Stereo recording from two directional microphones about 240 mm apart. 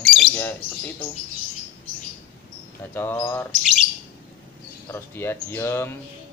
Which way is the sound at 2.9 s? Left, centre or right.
Centre.